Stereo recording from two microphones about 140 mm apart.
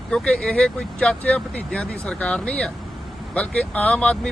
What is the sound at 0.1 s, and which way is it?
A man's voice, 5° left (ahead or behind).